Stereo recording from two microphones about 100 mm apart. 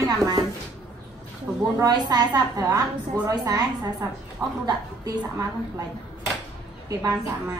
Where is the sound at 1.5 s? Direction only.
30° right (ahead or behind).